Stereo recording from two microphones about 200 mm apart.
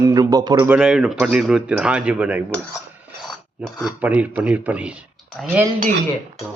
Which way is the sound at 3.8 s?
5° right (ahead or behind).